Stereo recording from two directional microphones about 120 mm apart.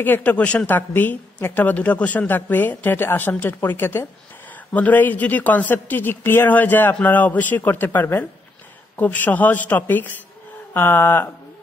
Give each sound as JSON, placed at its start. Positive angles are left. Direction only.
{"t": 0.0, "sound": "a woman's voice", "side_deg": 15}